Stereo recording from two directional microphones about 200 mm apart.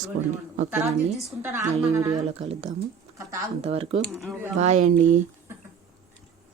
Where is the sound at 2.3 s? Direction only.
30° right (ahead or behind).